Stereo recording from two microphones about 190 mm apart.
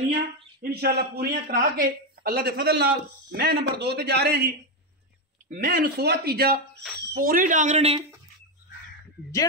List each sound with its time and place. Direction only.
0.6 s speech: 55° right (ahead or behind)
5.5 s speech: 50° right (ahead or behind); by 8.0 s 35° right (ahead or behind)